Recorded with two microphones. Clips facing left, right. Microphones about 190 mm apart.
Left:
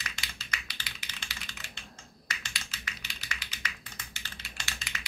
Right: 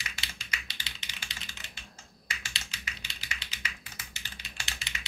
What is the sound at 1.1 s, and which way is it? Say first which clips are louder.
Typing: left 1 dB; 15° right (ahead or behind).